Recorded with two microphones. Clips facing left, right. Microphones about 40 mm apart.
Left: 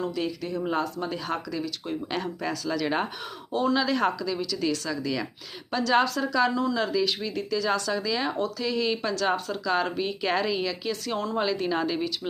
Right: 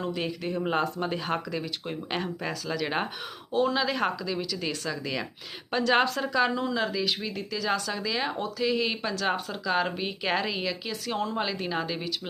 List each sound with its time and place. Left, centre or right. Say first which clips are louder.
0.0 s speech: left 1 dB; right; by 12.3 s centre